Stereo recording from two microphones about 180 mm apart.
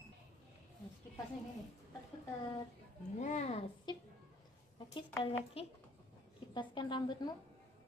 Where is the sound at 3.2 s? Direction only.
40° left (ahead or behind).